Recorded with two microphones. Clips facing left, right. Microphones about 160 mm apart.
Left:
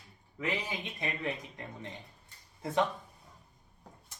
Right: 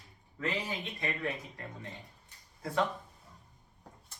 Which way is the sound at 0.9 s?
20° left (ahead or behind).